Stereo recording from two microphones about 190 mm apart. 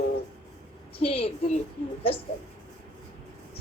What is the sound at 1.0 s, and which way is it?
Speech, 30° left (ahead or behind).